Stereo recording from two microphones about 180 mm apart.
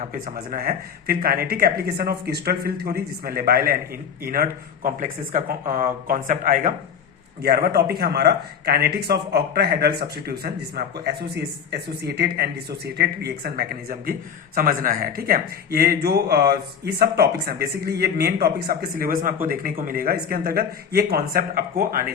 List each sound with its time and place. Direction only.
0.0 s a man's voice: 50° right (ahead or behind)
7.4 s a man's voice: 60° right (ahead or behind)